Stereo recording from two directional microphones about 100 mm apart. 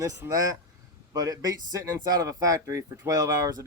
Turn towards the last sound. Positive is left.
turn(degrees=-40)  # may be behind; listen again after turning